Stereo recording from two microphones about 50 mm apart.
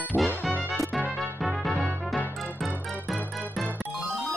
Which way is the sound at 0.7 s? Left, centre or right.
Centre.